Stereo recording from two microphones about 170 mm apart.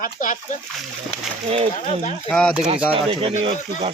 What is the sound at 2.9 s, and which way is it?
Speech, 30° right (ahead or behind).